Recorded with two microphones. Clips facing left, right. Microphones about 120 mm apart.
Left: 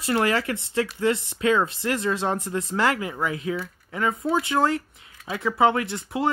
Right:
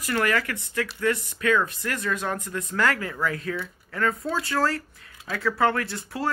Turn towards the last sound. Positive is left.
turn(degrees=20)  # may be behind; listen again after turning